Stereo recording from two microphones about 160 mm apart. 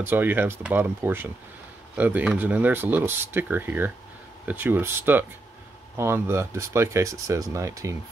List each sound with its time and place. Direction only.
0.0 s speech: 10° right (ahead or behind)